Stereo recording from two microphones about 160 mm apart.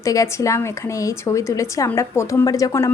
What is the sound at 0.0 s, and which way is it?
A woman's voice, 20° left (ahead or behind).